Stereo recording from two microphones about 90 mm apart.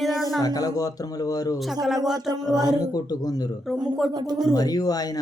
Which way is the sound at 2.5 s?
45° right (ahead or behind).